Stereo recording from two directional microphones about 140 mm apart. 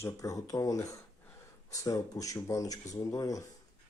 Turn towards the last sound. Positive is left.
turn(degrees=25)  # may be behind; listen again after turning